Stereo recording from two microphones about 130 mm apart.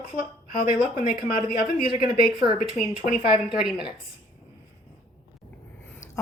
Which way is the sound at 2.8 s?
70° left (ahead or behind).